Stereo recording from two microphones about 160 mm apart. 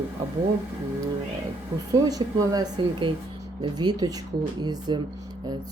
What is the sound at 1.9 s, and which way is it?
Speech, 25° right (ahead or behind).